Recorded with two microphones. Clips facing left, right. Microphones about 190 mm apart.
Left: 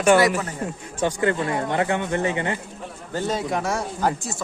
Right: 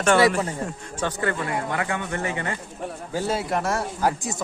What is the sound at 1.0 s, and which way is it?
Speech, 20° left (ahead or behind).